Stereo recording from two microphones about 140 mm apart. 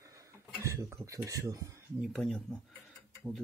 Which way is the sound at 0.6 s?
20° right (ahead or behind).